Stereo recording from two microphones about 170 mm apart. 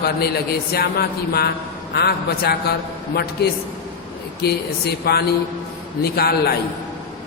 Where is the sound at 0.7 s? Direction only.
65° left (ahead or behind).